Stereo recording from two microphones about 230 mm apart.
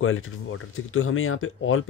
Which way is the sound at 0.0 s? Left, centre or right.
Left.